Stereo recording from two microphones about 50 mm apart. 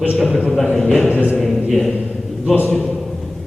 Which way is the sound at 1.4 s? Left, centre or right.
Centre.